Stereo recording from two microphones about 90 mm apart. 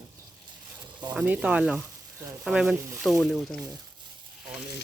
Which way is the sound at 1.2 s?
15° right (ahead or behind).